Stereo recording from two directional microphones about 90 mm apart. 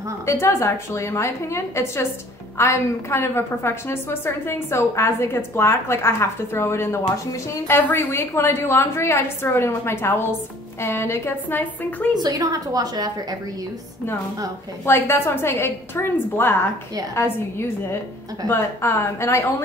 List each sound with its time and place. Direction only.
0.3 s a woman's voice: 30° left (ahead or behind)
12.2 s a woman's voice: 45° right (ahead or behind)
14.9 s a woman's voice: 30° left (ahead or behind)